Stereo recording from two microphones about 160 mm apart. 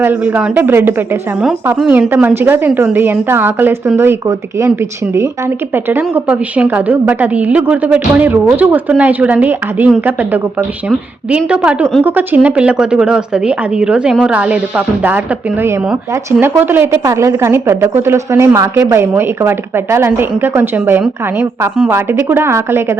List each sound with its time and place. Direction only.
0.0 s a woman's voice: 10° right (ahead or behind)